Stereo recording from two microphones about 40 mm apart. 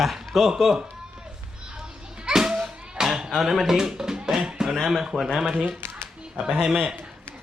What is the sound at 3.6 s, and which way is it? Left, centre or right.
Speech, centre.